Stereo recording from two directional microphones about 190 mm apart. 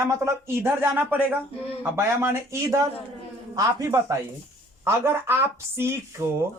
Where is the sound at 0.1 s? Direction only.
15° right (ahead or behind).